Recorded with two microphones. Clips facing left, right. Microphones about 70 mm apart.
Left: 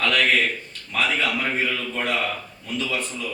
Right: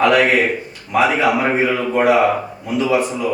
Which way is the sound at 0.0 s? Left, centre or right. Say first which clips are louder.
Right 7 dB; centre.